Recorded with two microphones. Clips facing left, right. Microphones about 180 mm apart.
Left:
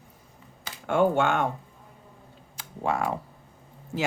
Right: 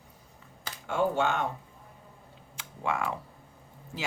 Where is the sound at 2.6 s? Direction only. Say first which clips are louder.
Left 4 dB; 40° left (ahead or behind).